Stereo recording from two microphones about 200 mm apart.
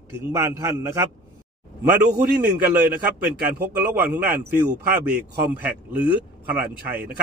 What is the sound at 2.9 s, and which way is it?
A man's voice, 50° right (ahead or behind).